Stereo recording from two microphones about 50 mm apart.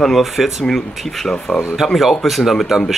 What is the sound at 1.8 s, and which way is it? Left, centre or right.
Speech, centre.